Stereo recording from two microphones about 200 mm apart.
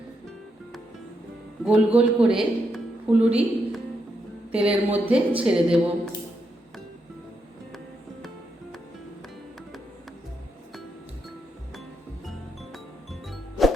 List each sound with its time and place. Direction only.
1.6 s a woman's voice: 5° right (ahead or behind)
12.7 s music: centre (ahead or behind)